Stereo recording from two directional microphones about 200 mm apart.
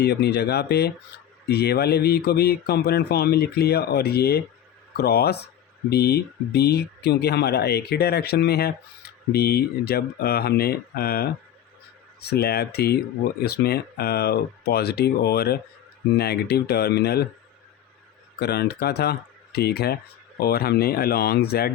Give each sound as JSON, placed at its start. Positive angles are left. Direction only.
{"t": 0.0, "sound": "speech", "side_deg": 55}
{"t": 18.3, "sound": "speech", "side_deg": 55}